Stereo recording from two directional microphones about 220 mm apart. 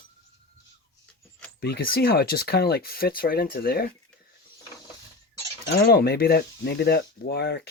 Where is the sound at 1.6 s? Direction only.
45° left (ahead or behind).